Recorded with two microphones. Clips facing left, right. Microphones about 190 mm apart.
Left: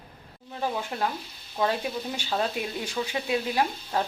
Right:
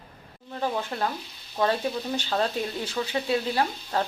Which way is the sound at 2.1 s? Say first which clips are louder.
Right 1 dB; 10° left (ahead or behind).